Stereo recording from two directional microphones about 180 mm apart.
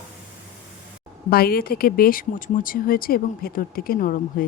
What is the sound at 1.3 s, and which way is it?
A woman's voice, 55° left (ahead or behind).